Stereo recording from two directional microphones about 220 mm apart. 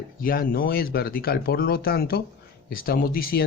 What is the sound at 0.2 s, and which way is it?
A man's voice, 40° left (ahead or behind).